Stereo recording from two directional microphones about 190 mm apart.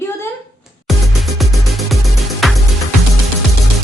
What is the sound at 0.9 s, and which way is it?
Music, centre (ahead or behind).